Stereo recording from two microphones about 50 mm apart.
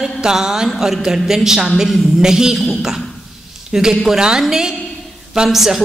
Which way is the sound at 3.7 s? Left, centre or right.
Centre.